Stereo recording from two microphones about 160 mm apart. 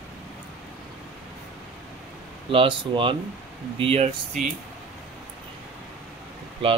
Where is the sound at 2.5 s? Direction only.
35° right (ahead or behind).